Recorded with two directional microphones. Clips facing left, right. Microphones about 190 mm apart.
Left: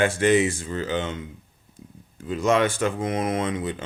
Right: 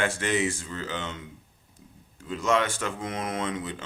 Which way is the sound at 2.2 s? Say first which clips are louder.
Left 4 dB; 15° left (ahead or behind).